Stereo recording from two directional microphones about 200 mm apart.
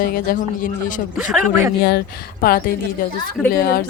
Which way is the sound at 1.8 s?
50° left (ahead or behind).